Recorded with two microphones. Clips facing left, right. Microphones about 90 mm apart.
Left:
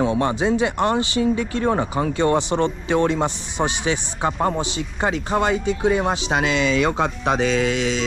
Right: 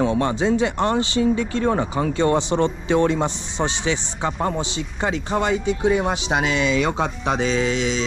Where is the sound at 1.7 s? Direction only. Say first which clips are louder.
Even; 25° left (ahead or behind).